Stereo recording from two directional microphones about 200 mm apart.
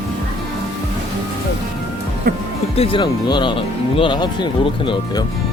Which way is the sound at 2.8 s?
25° left (ahead or behind).